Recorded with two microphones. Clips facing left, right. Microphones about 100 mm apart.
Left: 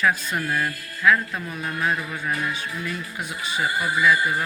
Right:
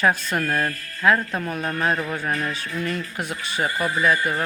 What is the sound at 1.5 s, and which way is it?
Speech, 50° right (ahead or behind).